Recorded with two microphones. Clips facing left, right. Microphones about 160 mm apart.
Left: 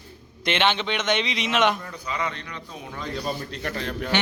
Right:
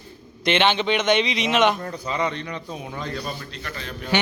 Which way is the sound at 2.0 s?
30° right (ahead or behind).